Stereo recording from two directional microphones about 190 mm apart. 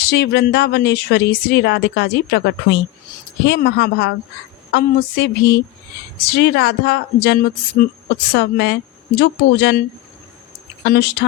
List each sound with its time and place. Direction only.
0.0 s speech: 60° left (ahead or behind)
10.8 s speech: 60° left (ahead or behind)